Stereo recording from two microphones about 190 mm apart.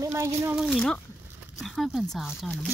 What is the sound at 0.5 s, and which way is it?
Speech, centre (ahead or behind).